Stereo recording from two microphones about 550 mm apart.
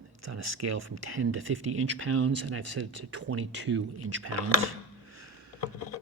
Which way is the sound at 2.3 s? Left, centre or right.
Right.